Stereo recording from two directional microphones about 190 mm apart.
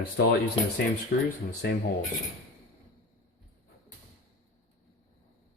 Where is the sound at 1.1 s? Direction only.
60° left (ahead or behind).